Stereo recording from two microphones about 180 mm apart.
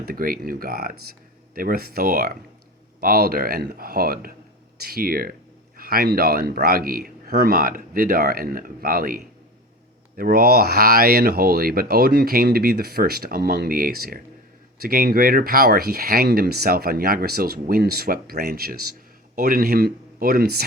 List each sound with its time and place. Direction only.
0.0 s speech: 55° right (ahead or behind)